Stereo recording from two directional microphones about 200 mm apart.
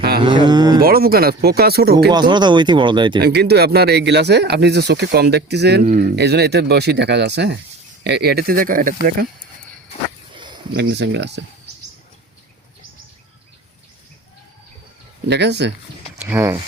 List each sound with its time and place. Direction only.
0.2 s cattle: 25° right (ahead or behind)
0.8 s speech: 50° right (ahead or behind)
2.1 s speech: 20° right (ahead or behind)
3.2 s speech: 55° right (ahead or behind)
5.8 s speech: 40° right (ahead or behind)
6.1 s speech: 55° right (ahead or behind)
10.3 s a sound: 25° right (ahead or behind)
10.8 s speech: 55° right (ahead or behind)
15.3 s speech: 55° right (ahead or behind)
16.2 s speech: 10° right (ahead or behind)